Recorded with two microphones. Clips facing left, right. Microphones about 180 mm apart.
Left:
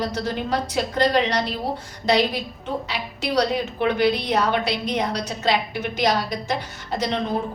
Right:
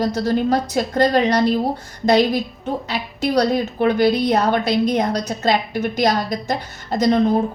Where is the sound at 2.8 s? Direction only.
45° right (ahead or behind).